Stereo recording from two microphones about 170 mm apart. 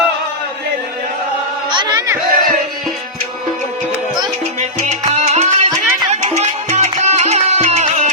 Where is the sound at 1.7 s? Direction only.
25° right (ahead or behind).